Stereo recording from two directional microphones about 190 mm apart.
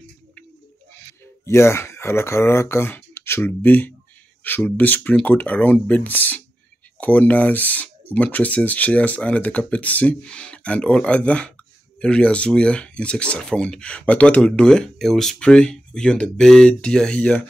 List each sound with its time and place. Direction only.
0.9 s speech: 15° left (ahead or behind)